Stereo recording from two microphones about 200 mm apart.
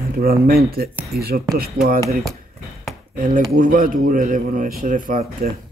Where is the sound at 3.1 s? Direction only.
45° right (ahead or behind).